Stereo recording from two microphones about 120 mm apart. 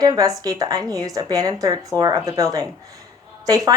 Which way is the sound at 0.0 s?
30° right (ahead or behind).